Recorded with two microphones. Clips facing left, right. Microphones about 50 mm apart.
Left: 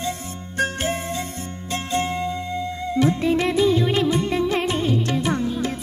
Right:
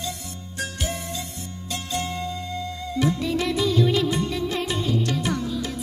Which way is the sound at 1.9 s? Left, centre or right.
Left.